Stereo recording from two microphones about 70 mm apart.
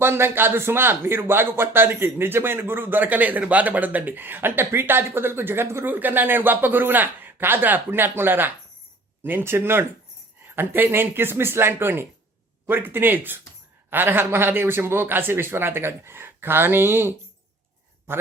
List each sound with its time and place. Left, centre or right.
0.0 s speech: right